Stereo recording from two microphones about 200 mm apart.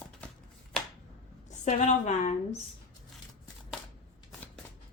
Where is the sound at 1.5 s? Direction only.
35° left (ahead or behind).